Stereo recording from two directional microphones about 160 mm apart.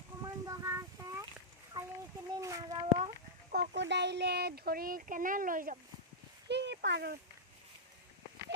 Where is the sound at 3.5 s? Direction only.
85° right; by 5.7 s 60° right (ahead or behind).